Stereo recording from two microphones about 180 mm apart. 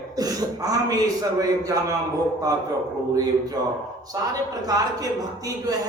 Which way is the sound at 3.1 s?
20° right (ahead or behind).